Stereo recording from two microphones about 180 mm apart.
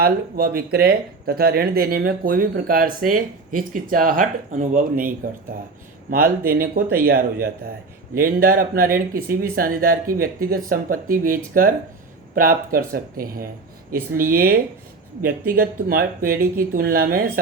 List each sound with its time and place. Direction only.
0.0 s speech: 55° right (ahead or behind)